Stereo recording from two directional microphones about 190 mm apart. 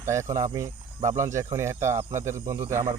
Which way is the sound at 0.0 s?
15° right (ahead or behind).